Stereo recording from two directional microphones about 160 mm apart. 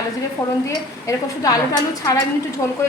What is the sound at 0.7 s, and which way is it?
A woman's voice, 20° left (ahead or behind).